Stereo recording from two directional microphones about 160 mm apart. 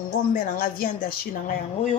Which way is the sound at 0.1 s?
60° left (ahead or behind).